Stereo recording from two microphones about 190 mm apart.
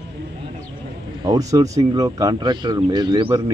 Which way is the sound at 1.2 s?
20° right (ahead or behind).